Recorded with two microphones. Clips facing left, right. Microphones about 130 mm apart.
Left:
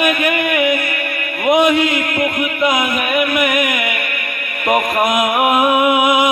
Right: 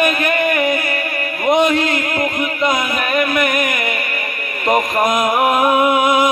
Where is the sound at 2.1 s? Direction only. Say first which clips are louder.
Left 1 dB; 35° right (ahead or behind).